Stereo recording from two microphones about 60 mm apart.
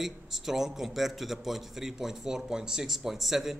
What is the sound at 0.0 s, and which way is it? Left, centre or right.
A man's voice, centre.